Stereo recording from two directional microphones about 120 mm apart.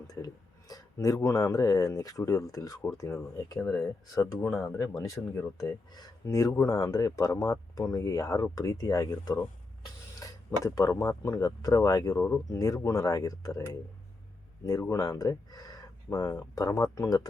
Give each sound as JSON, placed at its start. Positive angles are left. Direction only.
{"t": 0.7, "sound": "speech", "side_deg": 30}
{"t": 10.6, "sound": "speech", "side_deg": 25}
{"t": 14.7, "sound": "speech", "side_deg": 30}